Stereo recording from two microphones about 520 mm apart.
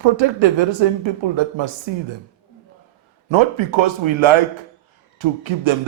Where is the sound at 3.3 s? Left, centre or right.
Right.